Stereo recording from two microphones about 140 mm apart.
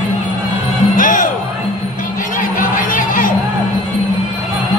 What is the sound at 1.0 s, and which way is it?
Music, 70° left (ahead or behind).